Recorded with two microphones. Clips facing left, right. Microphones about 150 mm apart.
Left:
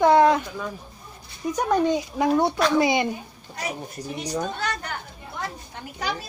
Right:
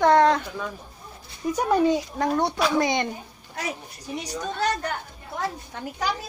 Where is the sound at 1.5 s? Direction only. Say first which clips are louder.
Right 1 dB; 5° right (ahead or behind).